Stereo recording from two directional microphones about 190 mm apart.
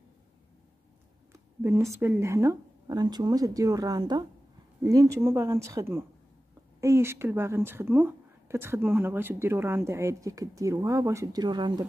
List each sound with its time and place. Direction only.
1.3 s a woman's voice: 15° right (ahead or behind)